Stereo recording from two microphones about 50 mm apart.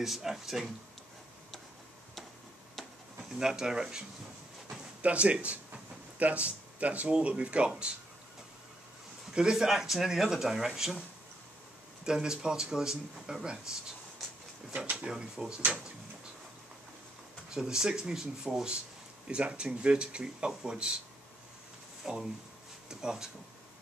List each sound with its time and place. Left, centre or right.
0.0 s speech: centre
3.3 s speech: centre
4.6 s a sound: right
6.1 s speech: right
9.3 s speech: centre
12.0 s speech: centre
15.0 s speech: centre
17.6 s speech: centre
22.0 s speech: centre